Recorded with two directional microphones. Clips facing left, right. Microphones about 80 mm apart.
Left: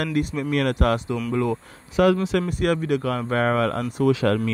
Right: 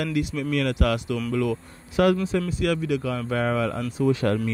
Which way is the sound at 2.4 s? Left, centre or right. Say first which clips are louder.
Left 2 dB; left.